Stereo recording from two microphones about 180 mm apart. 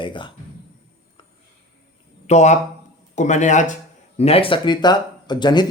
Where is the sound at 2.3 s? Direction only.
40° left (ahead or behind).